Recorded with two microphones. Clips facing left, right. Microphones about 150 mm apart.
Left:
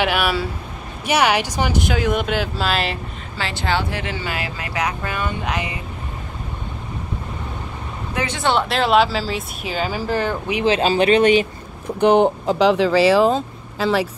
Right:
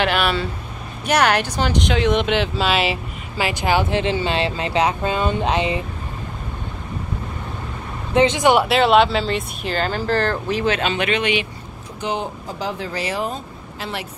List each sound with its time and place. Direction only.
0.0 s speech: 10° left (ahead or behind)
3.3 s speech: 15° right (ahead or behind)
8.1 s speech: 20° right (ahead or behind)
8.6 s speech: centre (ahead or behind)
10.6 s speech: 35° left (ahead or behind)
12.0 s speech: 60° left (ahead or behind); by 13.4 s 90° left